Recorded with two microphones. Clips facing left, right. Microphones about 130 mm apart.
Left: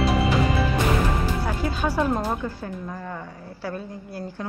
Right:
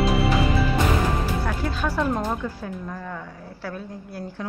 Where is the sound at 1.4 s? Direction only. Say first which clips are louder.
Left 1 dB; 5° left (ahead or behind).